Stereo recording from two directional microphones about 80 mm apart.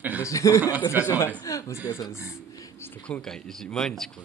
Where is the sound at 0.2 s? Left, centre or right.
Left.